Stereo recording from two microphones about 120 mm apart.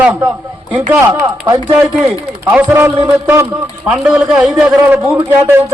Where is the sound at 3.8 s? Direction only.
10° right (ahead or behind).